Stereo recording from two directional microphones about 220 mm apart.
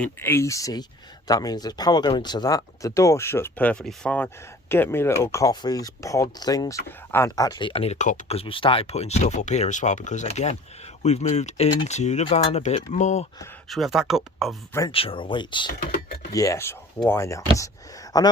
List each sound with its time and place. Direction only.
0.0 s speech: 10° left (ahead or behind); by 13.2 s 30° left (ahead or behind)
13.7 s speech: centre (ahead or behind)
14.7 s speech: 15° left (ahead or behind)
14.9 s speech: 25° left (ahead or behind)